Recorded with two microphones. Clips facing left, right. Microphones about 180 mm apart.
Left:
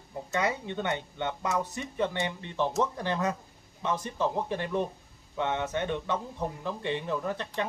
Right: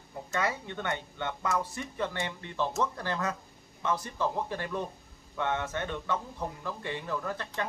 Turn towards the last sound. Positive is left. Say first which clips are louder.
# left 3 dB
turn(degrees=20)  # may be behind; listen again after turning